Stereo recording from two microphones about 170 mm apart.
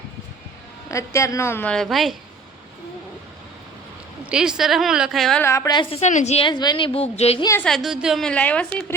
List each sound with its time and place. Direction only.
0.9 s a woman's voice: 15° left (ahead or behind); by 2.1 s centre (ahead or behind)
4.3 s a woman's voice: 5° right (ahead or behind)
5.4 s a woman's voice: 15° left (ahead or behind)
6.1 s a woman's voice: 45° left (ahead or behind)
7.6 s a woman's voice: centre (ahead or behind)